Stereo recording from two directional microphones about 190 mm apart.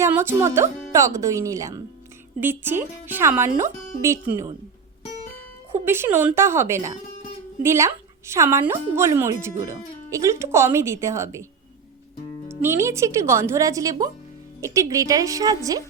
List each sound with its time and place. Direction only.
0.0 s speech: 15° right (ahead or behind)
5.8 s speech: 10° right (ahead or behind)
12.5 s speech: 15° right (ahead or behind)